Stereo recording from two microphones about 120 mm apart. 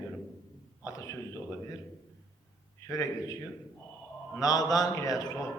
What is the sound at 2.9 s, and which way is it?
Speech, 30° left (ahead or behind).